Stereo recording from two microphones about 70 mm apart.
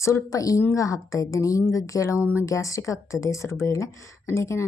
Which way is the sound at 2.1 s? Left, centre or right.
Right.